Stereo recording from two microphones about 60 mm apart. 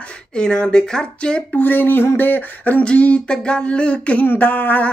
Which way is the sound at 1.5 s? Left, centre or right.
Left.